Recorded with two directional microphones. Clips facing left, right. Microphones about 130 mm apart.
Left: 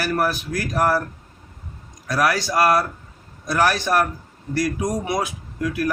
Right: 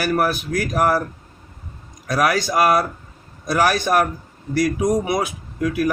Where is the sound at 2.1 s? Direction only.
15° right (ahead or behind).